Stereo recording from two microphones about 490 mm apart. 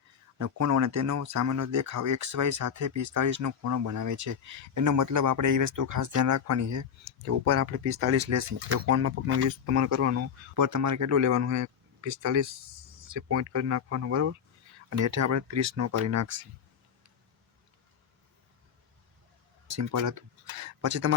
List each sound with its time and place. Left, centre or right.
0.3 s speech: right
19.6 s speech: right